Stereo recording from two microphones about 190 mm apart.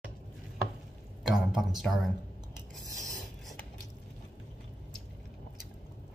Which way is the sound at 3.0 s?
Centre (ahead or behind).